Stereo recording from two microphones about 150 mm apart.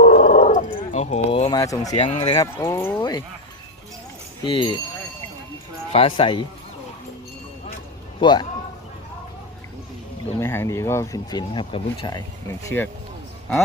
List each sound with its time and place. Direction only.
0.0 s roaring cats: 65° left (ahead or behind)
0.3 s roaring cats: 50° left (ahead or behind)
1.5 s speech: 25° left (ahead or behind)
2.0 s speech: 45° left (ahead or behind)
2.4 s speech: 20° left (ahead or behind)
3.0 s speech: 30° left (ahead or behind)
4.4 s speech: 35° left (ahead or behind)
5.9 s speech: 35° left (ahead or behind)
8.2 s speech: 30° left (ahead or behind)
10.4 s speech: 15° left (ahead or behind)